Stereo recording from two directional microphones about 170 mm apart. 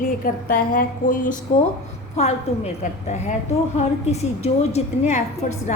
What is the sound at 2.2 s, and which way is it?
Speech, 40° left (ahead or behind).